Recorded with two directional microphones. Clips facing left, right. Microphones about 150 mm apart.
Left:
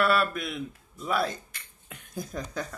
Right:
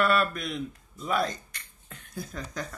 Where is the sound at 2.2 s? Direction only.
15° left (ahead or behind).